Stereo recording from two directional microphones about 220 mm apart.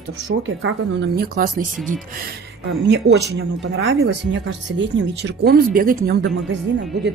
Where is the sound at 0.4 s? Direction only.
60° right (ahead or behind); by 1.7 s 40° right (ahead or behind).